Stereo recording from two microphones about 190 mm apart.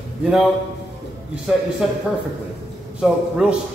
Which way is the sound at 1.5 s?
5° right (ahead or behind).